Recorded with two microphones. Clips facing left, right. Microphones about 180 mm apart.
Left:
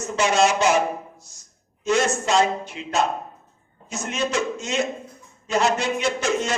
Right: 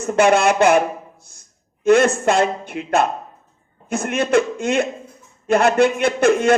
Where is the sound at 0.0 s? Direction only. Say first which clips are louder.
Right 5 dB; 55° right (ahead or behind).